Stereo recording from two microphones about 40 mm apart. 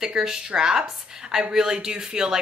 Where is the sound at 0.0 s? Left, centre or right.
Centre.